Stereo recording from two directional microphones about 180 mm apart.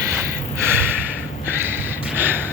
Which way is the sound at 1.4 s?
10° right (ahead or behind).